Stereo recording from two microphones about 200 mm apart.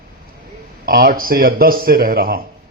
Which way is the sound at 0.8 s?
45° right (ahead or behind).